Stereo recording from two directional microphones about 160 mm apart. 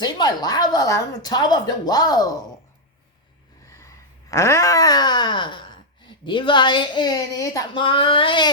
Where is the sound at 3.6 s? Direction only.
20° left (ahead or behind).